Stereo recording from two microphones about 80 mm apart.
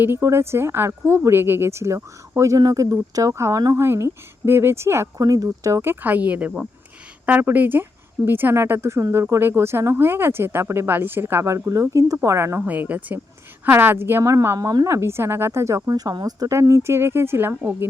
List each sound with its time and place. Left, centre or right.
0.2 s speech: right
2.6 s speech: right
5.2 s speech: right
5.9 s speech: right
14.8 s speech: right
15.9 s speech: right
16.5 s speech: right